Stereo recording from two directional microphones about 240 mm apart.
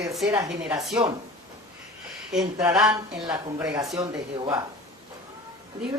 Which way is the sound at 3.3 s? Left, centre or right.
Centre.